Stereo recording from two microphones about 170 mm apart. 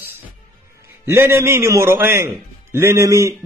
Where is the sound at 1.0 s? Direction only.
15° right (ahead or behind).